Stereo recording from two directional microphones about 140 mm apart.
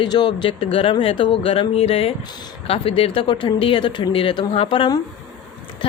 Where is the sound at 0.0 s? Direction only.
35° left (ahead or behind).